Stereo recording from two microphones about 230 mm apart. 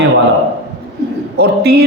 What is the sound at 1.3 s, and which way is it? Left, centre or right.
Speech, right.